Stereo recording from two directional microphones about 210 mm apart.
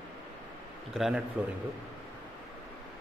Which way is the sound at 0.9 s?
Centre (ahead or behind).